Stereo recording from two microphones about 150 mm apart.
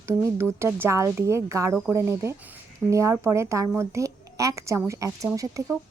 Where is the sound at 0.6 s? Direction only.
20° right (ahead or behind).